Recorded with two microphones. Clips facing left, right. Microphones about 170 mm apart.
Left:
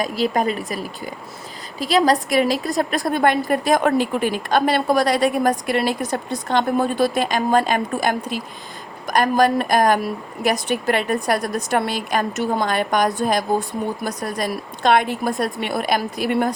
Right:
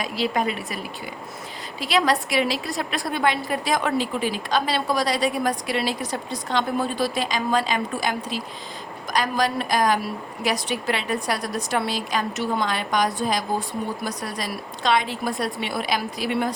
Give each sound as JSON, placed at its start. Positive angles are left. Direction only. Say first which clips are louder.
{"t": 0.0, "sound": "a woman's voice", "louder": "left 4 dB", "side_deg": 45}